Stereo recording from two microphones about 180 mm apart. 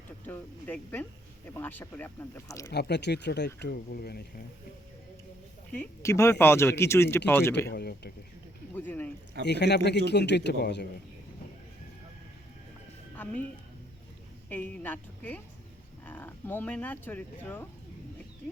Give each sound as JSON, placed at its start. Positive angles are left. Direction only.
{"t": 0.3, "sound": "speech", "side_deg": 10}
{"t": 2.6, "sound": "speech", "side_deg": 70}
{"t": 5.7, "sound": "speech", "side_deg": 15}
{"t": 7.7, "sound": "speech", "side_deg": 65}
{"t": 8.7, "sound": "speech", "side_deg": 10}
{"t": 9.4, "sound": "speech", "side_deg": 70}
{"t": 14.5, "sound": "speech", "side_deg": 10}